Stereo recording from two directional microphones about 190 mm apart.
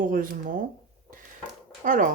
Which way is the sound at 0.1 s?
45° right (ahead or behind).